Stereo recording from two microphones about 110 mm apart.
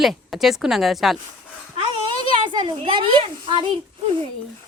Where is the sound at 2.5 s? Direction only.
45° right (ahead or behind).